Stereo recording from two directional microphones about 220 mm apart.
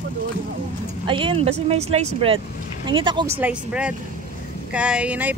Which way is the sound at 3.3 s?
5° right (ahead or behind).